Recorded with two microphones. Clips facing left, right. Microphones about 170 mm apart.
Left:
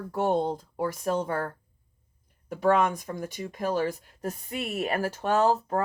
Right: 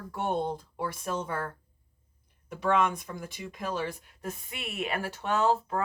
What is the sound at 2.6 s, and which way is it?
Speech, 40° left (ahead or behind).